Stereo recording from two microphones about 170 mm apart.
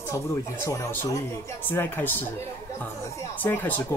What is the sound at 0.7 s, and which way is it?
Speech, 20° left (ahead or behind).